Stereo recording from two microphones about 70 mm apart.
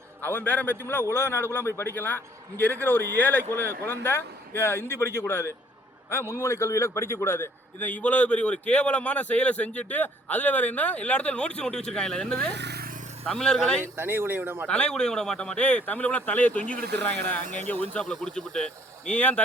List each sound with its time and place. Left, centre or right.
0.2 s a man's voice: left; by 13.8 s centre
13.9 s speech: right
14.7 s a man's voice: centre
18.0 s speech: centre